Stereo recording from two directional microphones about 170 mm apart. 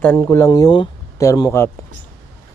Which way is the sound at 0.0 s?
15° left (ahead or behind).